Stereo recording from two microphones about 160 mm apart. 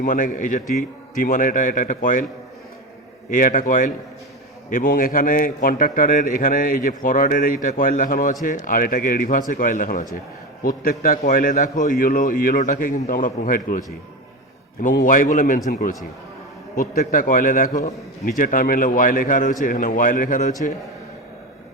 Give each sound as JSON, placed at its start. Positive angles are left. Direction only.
{"t": 0.0, "sound": "a man's voice", "side_deg": 55}
{"t": 3.2, "sound": "a man's voice", "side_deg": 55}
{"t": 14.9, "sound": "a man's voice", "side_deg": 60}
{"t": 16.7, "sound": "a man's voice", "side_deg": 70}